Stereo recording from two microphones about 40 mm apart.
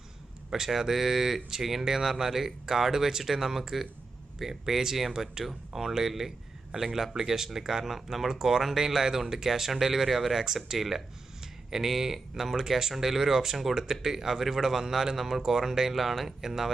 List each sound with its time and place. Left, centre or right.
0.5 s speech: centre